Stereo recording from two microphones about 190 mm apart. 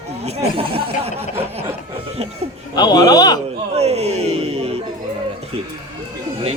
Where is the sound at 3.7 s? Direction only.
35° right (ahead or behind).